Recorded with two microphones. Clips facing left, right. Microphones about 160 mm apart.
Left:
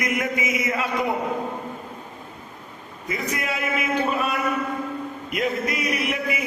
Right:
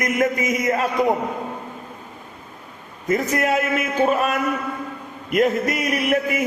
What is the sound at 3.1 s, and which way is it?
A man's voice, 45° right (ahead or behind).